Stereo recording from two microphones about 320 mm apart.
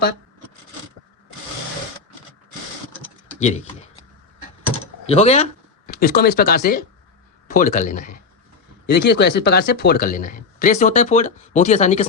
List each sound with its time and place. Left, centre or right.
3.4 s speech: left
4.7 s typing: centre
7.5 s speech: left